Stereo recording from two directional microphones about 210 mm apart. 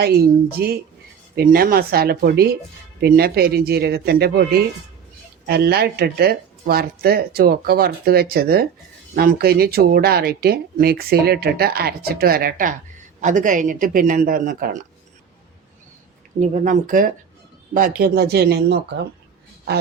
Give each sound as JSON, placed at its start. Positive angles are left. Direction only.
{"t": 0.0, "sound": "speech", "side_deg": -50}
{"t": 5.5, "sound": "speech", "side_deg": -50}
{"t": 16.4, "sound": "speech", "side_deg": -35}